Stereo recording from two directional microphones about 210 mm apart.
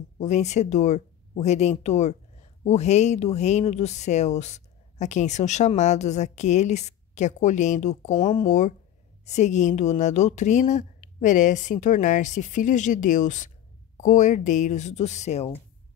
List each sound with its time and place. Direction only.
0.2 s speech: 35° left (ahead or behind)